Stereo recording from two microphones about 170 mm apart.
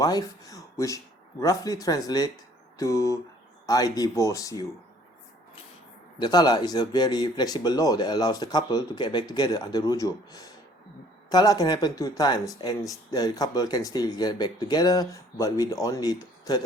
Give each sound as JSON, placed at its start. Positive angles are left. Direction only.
{"t": 0.0, "sound": "speech", "side_deg": 20}
{"t": 6.1, "sound": "speech", "side_deg": 25}